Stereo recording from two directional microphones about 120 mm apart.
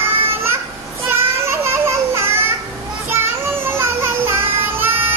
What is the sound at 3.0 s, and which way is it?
Children playing, 20° right (ahead or behind).